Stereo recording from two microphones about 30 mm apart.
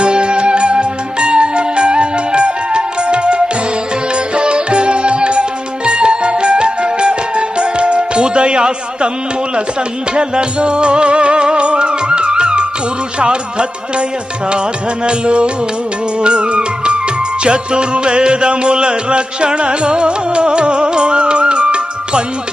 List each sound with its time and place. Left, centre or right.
0.0 s music: right
10.2 s music: right
15.0 s music: right